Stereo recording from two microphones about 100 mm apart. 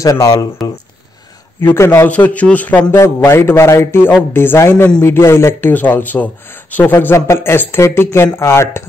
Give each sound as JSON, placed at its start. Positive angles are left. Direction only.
{"t": 0.0, "sound": "speech", "side_deg": 35}
{"t": 1.6, "sound": "a man's voice", "side_deg": 25}